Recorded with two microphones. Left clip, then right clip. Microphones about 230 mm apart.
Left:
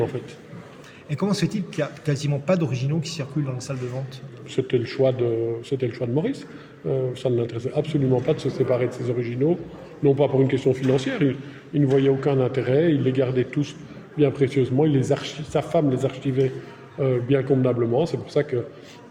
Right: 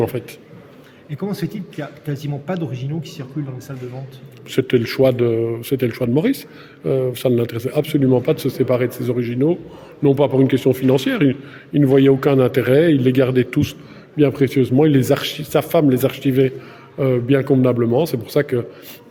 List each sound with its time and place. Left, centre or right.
0.1 s a man's voice: right
1.1 s speech: centre
4.5 s a man's voice: right